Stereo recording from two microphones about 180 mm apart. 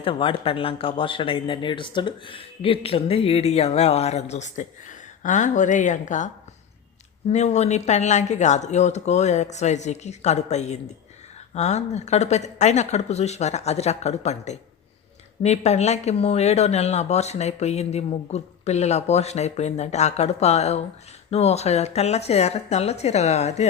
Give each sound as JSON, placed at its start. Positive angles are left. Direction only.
{"t": 0.0, "sound": "speech", "side_deg": 30}